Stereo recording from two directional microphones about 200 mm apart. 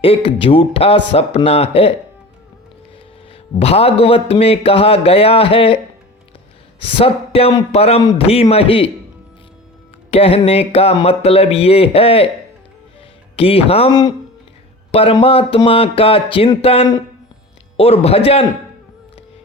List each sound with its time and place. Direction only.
0.0 s speech: 25° left (ahead or behind)
3.6 s speech: 30° left (ahead or behind)
7.0 s speech: 30° left (ahead or behind)
10.1 s speech: 30° left (ahead or behind)
13.3 s speech: 30° left (ahead or behind)